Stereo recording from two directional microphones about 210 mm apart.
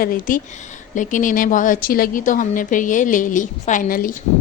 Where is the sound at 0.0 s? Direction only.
40° left (ahead or behind).